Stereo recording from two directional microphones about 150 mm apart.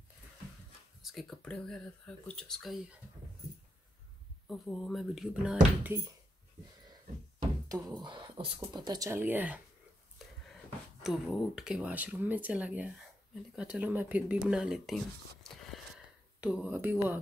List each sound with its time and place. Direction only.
1.0 s speech: 5° left (ahead or behind)
4.5 s speech: 5° left (ahead or behind)
7.6 s speech: 25° right (ahead or behind)
10.2 s a sound: centre (ahead or behind)
11.0 s speech: centre (ahead or behind)
16.3 s speech: 10° right (ahead or behind)